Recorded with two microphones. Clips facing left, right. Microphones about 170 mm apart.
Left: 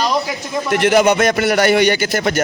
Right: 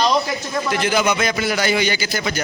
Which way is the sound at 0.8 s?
65° left (ahead or behind).